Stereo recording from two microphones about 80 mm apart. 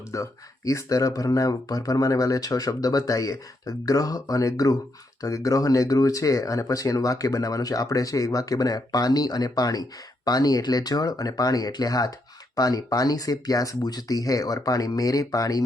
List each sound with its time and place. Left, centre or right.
0.1 s speech: left